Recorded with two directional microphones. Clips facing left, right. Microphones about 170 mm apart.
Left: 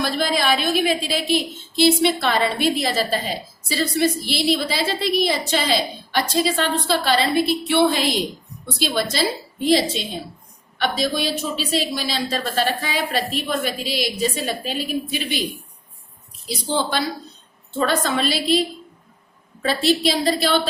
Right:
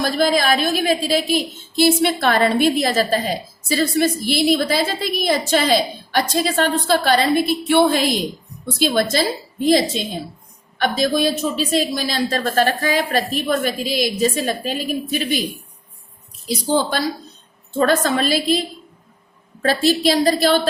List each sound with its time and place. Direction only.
0.0 s a woman's voice: 45° right (ahead or behind)
10.8 s a woman's voice: 45° right (ahead or behind)
16.5 s a woman's voice: 45° right (ahead or behind)
19.6 s a woman's voice: 45° right (ahead or behind)